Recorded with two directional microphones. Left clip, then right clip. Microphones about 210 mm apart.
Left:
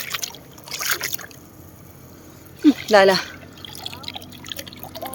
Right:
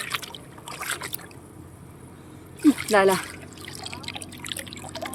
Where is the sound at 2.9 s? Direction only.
20° left (ahead or behind).